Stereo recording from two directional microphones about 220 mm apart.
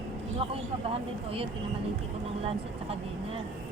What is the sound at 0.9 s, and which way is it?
Speech, 25° right (ahead or behind).